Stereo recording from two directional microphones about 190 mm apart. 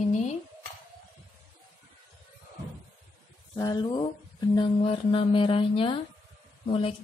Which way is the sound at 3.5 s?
20° left (ahead or behind).